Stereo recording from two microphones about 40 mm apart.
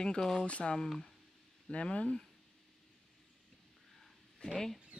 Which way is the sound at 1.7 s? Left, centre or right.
Left.